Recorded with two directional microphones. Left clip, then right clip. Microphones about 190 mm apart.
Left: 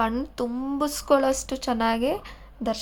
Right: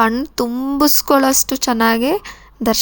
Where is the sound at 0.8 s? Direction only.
35° right (ahead or behind).